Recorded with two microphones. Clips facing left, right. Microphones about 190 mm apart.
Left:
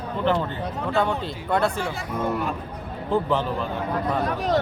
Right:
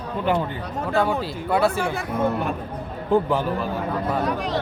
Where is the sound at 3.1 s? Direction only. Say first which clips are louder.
Right 3 dB; 10° right (ahead or behind).